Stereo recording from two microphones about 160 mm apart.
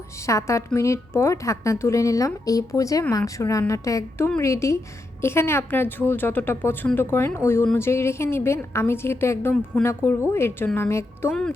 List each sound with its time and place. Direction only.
0.2 s a woman's voice: 20° left (ahead or behind)
11.3 s speech: 5° left (ahead or behind)